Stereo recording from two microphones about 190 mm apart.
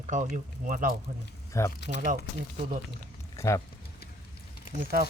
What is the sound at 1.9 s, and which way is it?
Speech, 45° right (ahead or behind).